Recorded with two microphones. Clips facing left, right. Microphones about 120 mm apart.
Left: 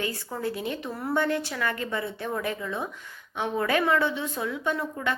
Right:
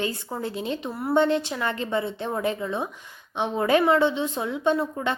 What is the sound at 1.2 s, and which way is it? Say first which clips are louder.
Speech: right 5 dB; 20° right (ahead or behind).